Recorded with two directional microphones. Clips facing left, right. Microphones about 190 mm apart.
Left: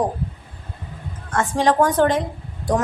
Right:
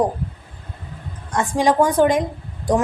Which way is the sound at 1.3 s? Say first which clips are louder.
Right 1 dB; 15° right (ahead or behind).